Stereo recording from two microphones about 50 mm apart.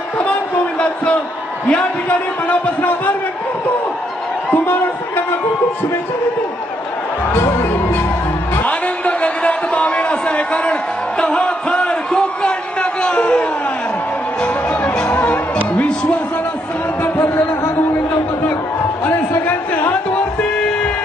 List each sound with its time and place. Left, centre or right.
1.6 s a man's voice: left
4.5 s speech: left
8.6 s a sound: left
15.1 s music: left
17.0 s a sound: left
19.0 s music: left
19.9 s music: left